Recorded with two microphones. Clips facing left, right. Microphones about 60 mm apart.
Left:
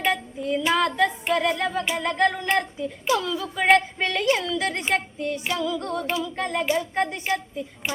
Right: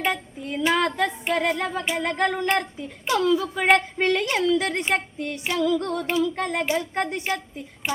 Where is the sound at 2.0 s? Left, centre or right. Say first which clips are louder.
Left 1 dB; right.